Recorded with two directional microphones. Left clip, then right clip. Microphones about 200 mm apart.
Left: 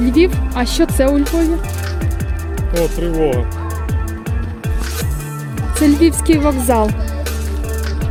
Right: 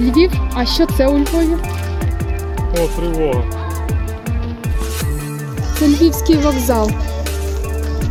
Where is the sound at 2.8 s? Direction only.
Centre (ahead or behind).